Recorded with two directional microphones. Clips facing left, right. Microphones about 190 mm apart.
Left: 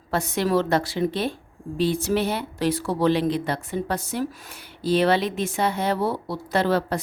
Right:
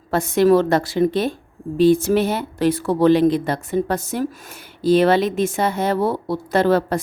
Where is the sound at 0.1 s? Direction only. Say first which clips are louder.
Right 8 dB; 50° right (ahead or behind).